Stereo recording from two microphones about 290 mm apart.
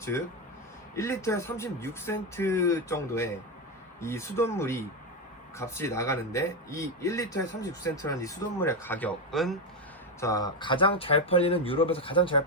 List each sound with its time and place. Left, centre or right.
0.1 s a man's voice: centre
10.2 s a man's voice: centre